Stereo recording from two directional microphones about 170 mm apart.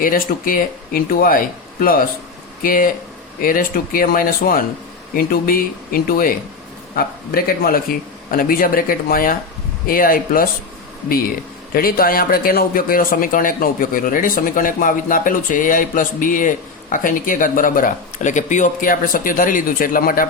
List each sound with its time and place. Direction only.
0.0 s speech: 55° left (ahead or behind)
11.7 s a man's voice: 60° left (ahead or behind)